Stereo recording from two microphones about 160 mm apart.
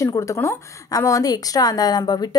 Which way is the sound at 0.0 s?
20° left (ahead or behind).